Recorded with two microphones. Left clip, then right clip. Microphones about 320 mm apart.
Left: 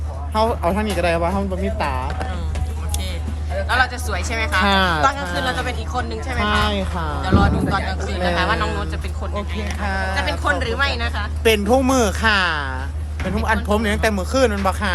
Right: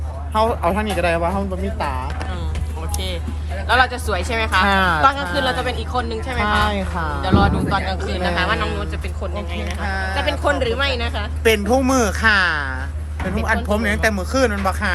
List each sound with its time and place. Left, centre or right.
0.3 s a woman's voice: centre
3.7 s a woman's voice: centre
9.8 s speech: centre
10.2 s a woman's voice: centre